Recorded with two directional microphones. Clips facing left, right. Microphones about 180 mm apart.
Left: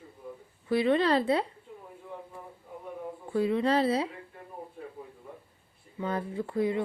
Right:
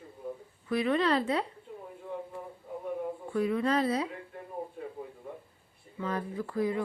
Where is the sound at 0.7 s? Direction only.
30° left (ahead or behind).